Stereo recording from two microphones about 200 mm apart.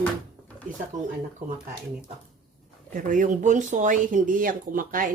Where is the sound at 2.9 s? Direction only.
40° right (ahead or behind).